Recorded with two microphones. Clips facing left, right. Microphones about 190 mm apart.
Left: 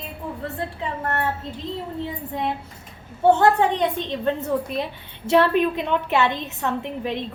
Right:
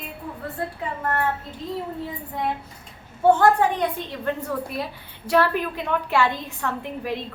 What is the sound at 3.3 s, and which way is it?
A woman's voice, 25° left (ahead or behind).